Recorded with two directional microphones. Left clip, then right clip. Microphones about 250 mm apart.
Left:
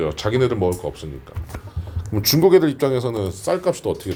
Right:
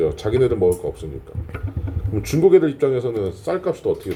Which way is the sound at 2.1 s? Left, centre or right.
Left.